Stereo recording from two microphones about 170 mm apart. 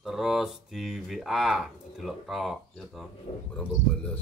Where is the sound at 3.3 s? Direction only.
35° left (ahead or behind).